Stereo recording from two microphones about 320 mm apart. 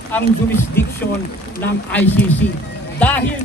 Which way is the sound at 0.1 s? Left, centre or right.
Centre.